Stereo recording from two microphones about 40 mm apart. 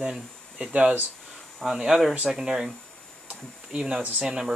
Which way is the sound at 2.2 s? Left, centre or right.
Centre.